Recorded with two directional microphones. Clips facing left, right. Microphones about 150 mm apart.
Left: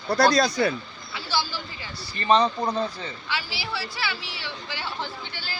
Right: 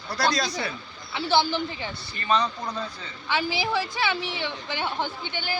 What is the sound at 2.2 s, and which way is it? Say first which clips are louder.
Speech: left 5 dB; 30° left (ahead or behind).